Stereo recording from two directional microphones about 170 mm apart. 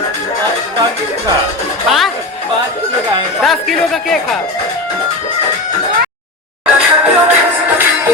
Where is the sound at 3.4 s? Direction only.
Centre (ahead or behind).